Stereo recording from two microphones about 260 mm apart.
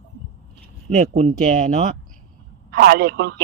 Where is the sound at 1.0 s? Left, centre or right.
Right.